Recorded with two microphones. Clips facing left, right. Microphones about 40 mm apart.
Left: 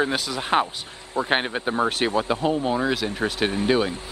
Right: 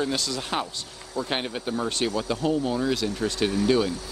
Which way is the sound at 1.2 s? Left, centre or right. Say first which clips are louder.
Left 5 dB; left.